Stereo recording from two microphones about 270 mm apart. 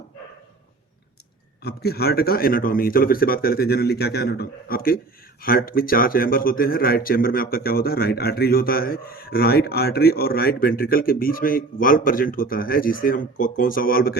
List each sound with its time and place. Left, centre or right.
1.6 s speech: left